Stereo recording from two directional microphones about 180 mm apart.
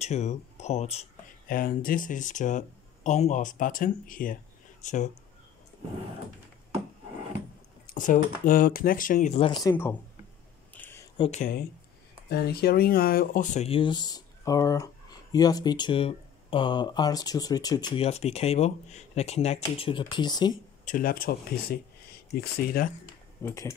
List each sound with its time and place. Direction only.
0.0 s speech: 40° left (ahead or behind)
1.5 s speech: 50° left (ahead or behind)
7.8 s speech: 45° left (ahead or behind)
9.5 s speech: 20° left (ahead or behind)
10.7 s a sound: 10° left (ahead or behind)
11.1 s speech: 35° left (ahead or behind)
12.3 s speech: 60° left (ahead or behind); by 18.0 s 25° left (ahead or behind)
18.0 s speech: 35° left (ahead or behind)
20.8 s speech: 50° left (ahead or behind)
23.4 s speech: 15° left (ahead or behind)